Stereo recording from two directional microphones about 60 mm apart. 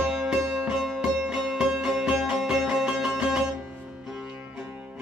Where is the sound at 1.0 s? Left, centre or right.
Centre.